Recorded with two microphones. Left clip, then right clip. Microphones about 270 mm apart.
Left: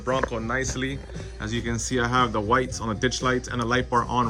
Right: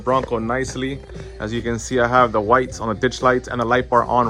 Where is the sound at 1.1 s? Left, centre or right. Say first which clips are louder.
Right 5 dB; centre.